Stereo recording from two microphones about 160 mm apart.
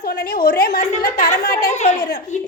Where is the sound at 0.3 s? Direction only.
65° left (ahead or behind).